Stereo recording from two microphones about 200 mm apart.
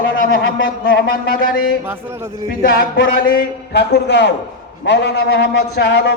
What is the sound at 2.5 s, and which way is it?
A man's voice, 45° left (ahead or behind).